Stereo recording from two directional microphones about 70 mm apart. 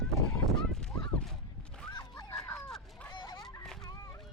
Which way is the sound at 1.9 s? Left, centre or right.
Left.